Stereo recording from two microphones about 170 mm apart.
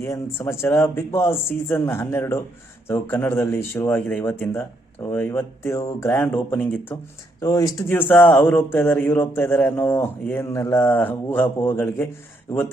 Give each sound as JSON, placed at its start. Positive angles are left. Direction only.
{"t": 0.0, "sound": "speech", "side_deg": 15}
{"t": 7.9, "sound": "speech", "side_deg": 10}